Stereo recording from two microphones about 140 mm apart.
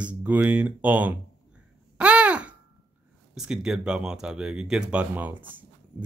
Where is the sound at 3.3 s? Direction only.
5° right (ahead or behind).